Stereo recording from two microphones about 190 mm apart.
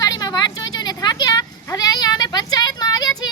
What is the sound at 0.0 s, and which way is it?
Sheep, 20° left (ahead or behind).